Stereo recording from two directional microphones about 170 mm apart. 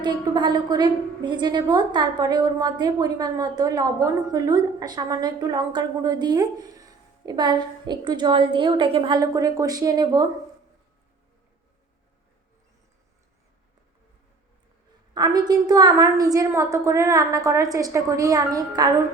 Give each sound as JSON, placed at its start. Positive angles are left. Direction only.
{"t": 0.0, "sound": "a woman's voice", "side_deg": -25}
{"t": 15.1, "sound": "a woman's voice", "side_deg": -25}